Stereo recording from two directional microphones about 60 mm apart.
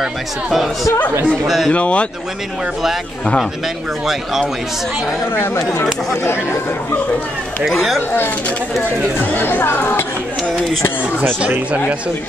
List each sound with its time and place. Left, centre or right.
0.0 s speech: centre
1.7 s speech: left
4.0 s speech: centre
5.3 s speech: left
7.6 s speech: centre
9.3 s speech: left